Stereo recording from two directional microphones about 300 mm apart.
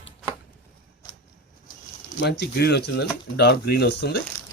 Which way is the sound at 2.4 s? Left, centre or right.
Left.